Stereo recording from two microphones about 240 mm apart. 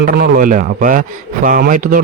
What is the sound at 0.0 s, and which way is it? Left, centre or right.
Speech, right.